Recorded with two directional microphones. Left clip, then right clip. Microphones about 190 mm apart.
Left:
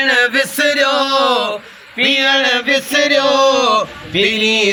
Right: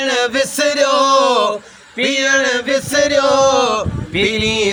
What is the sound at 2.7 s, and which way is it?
Music, 25° right (ahead or behind).